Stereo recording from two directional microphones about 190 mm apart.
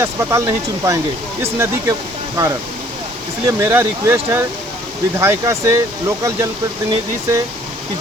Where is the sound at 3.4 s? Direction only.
15° right (ahead or behind).